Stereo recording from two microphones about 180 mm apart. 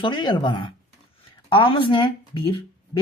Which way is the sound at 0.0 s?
25° left (ahead or behind).